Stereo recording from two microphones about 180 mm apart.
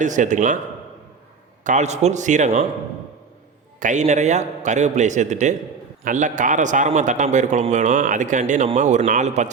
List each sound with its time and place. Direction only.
0.0 s a man's voice: 45° right (ahead or behind)
1.6 s a man's voice: 40° right (ahead or behind)
3.8 s a man's voice: 45° right (ahead or behind)